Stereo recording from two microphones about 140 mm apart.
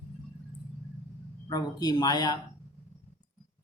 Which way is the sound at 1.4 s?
30° left (ahead or behind).